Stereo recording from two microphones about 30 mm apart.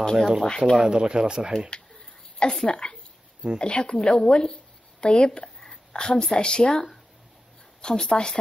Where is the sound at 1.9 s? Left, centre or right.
Left.